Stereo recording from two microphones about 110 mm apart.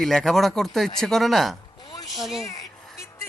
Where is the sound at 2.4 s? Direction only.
30° left (ahead or behind).